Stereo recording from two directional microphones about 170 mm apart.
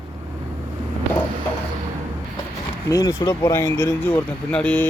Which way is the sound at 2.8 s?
20° left (ahead or behind).